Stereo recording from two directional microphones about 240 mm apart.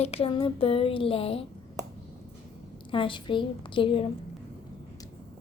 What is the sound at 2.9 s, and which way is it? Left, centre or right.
A woman's voice, left.